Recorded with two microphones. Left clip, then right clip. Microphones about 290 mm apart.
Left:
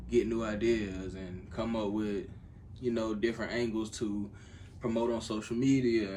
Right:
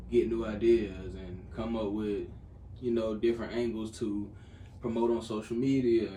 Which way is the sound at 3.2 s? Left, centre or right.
Left.